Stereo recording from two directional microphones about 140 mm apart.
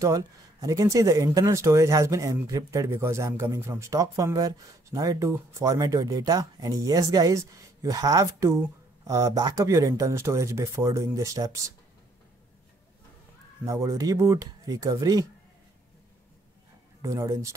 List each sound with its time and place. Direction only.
0.0 s speech: 25° right (ahead or behind)
13.7 s speech: 25° right (ahead or behind)
17.0 s speech: 25° right (ahead or behind)